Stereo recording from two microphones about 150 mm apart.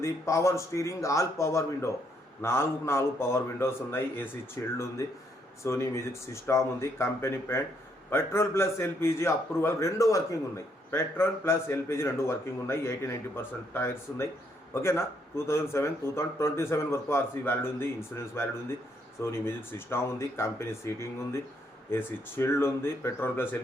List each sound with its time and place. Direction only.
0.0 s a man's voice: 20° left (ahead or behind)